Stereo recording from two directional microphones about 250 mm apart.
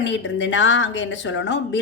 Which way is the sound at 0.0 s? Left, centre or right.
Left.